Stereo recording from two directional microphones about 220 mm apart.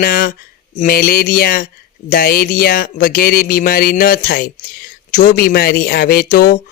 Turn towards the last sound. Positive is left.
turn(degrees=40)  # may be behind; listen again after turning